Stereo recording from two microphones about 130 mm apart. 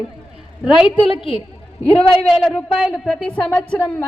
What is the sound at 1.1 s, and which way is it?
Speech, 40° left (ahead or behind).